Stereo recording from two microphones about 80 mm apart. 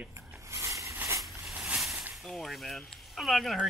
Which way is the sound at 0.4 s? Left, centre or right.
Right.